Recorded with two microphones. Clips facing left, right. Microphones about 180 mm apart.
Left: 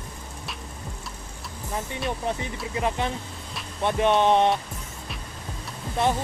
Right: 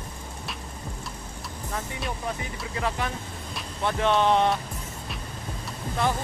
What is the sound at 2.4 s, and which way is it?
Speech, 20° left (ahead or behind).